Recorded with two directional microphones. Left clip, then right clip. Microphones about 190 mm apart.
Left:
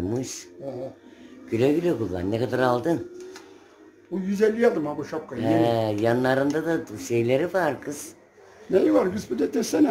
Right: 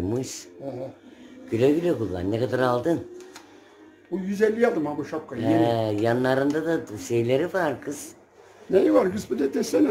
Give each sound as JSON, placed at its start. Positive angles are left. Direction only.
{"t": 0.0, "sound": "speech", "side_deg": 0}
{"t": 4.1, "sound": "speech", "side_deg": 0}
{"t": 9.4, "sound": "speech", "side_deg": 25}